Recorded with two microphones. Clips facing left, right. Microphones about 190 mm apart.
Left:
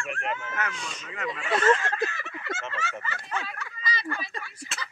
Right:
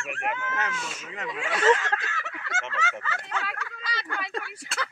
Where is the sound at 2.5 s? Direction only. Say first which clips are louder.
Right 2 dB; 80° right.